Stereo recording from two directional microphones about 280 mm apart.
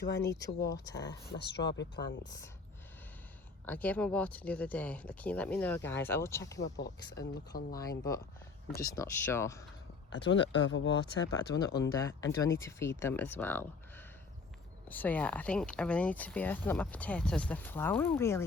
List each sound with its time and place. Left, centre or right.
0.3 s speech: centre
1.3 s speech: left
3.7 s speech: centre
6.7 s speech: left
7.8 s speech: centre
10.1 s speech: left
11.8 s speech: centre